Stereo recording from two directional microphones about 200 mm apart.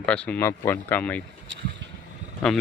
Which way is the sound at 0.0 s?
5° left (ahead or behind).